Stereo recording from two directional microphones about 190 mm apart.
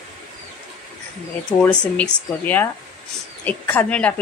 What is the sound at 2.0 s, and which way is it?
A woman's voice, 10° left (ahead or behind).